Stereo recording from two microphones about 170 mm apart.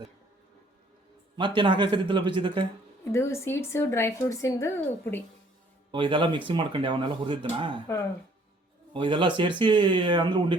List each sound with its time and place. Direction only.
1.4 s speech: 30° right (ahead or behind)
3.1 s speech: 15° left (ahead or behind)
5.9 s speech: 30° right (ahead or behind)
8.9 s speech: 30° right (ahead or behind)